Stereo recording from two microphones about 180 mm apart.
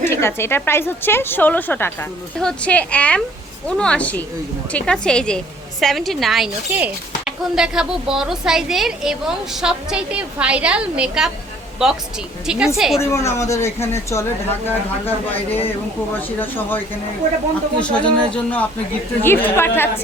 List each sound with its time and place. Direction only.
0.0 s a woman's voice: 15° left (ahead or behind); by 11.3 s 5° right (ahead or behind)
12.5 s speech: 5° right (ahead or behind)
13.0 s a woman's voice: 15° left (ahead or behind)